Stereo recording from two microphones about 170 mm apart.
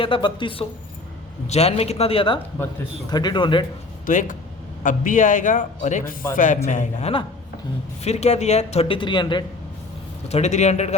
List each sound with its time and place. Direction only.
0.0 s speech: 30° left (ahead or behind)
4.0 s a man's voice: 50° left (ahead or behind); by 9.4 s 25° left (ahead or behind)
10.2 s speech: 40° left (ahead or behind)